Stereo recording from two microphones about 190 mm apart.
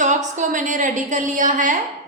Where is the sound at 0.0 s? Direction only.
40° right (ahead or behind).